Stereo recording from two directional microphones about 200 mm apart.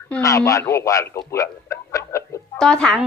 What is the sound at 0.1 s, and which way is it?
Speech, 15° left (ahead or behind).